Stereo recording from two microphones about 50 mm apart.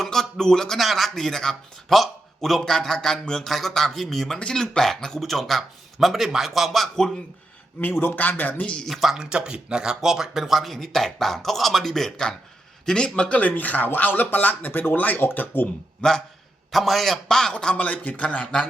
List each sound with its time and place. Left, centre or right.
0.0 s a sound: centre
0.8 s a man's voice: centre
4.4 s speech: centre
8.1 s speech: left
8.9 s a man's voice: centre
13.4 s speech: left
16.0 s a man's voice: centre
16.7 s a man's voice: centre
17.7 s speech: left
18.2 s a man's voice: left